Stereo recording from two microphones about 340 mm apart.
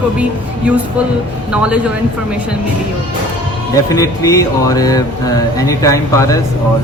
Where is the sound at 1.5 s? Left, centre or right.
Centre.